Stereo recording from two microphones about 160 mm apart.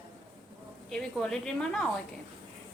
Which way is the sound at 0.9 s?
5° left (ahead or behind).